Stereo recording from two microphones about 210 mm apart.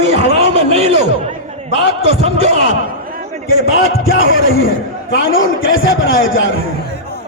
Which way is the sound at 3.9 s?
70° left (ahead or behind).